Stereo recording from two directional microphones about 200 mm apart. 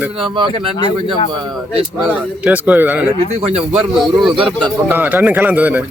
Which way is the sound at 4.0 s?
5° right (ahead or behind).